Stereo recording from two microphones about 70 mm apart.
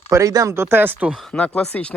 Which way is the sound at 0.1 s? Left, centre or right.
Right.